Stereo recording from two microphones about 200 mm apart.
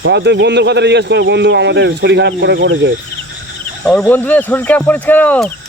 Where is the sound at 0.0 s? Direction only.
60° right (ahead or behind).